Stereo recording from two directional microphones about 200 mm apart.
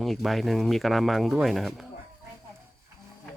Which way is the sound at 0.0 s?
Centre (ahead or behind).